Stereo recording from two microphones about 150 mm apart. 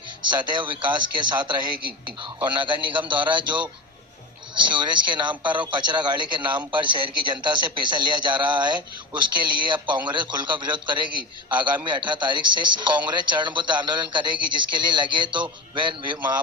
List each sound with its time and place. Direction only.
0.3 s a man's voice: 30° right (ahead or behind)